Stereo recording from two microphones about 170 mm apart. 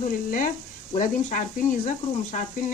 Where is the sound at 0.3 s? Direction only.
50° left (ahead or behind).